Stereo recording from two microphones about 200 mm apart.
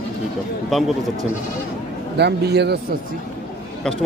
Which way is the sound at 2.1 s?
55° right (ahead or behind).